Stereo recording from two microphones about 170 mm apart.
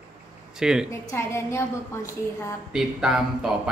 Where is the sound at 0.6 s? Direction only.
5° right (ahead or behind).